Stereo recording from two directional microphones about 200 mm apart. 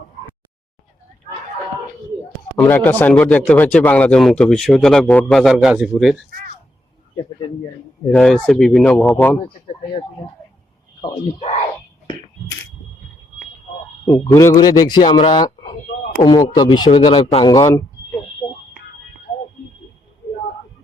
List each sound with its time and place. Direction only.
2.6 s speech: 10° left (ahead or behind)
8.1 s speech: 5° left (ahead or behind)
11.0 s a man's voice: 25° left (ahead or behind)
14.0 s a man's voice: 15° left (ahead or behind)